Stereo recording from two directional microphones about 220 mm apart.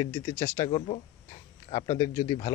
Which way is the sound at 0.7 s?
30° left (ahead or behind).